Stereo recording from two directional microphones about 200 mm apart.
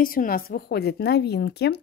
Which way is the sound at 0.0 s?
45° left (ahead or behind).